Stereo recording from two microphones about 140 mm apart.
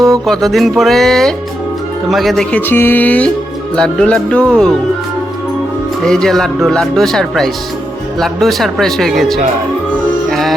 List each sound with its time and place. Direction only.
0.1 s speech: centre (ahead or behind)
6.0 s speech: 5° left (ahead or behind)
10.2 s music: centre (ahead or behind)